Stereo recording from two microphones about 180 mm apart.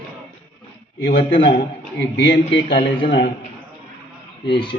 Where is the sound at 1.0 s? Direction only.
70° left (ahead or behind).